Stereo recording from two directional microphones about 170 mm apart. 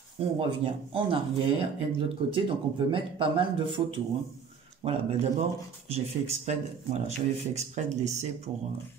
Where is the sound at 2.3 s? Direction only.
30° right (ahead or behind).